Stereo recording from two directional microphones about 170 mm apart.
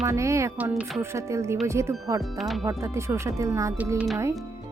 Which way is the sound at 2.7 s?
20° right (ahead or behind).